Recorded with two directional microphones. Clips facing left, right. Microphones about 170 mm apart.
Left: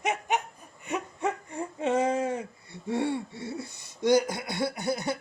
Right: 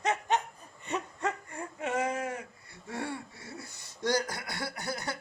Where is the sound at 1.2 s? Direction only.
20° left (ahead or behind).